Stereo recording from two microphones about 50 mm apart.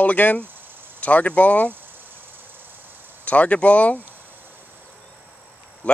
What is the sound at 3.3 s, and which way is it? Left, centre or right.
Speech, left.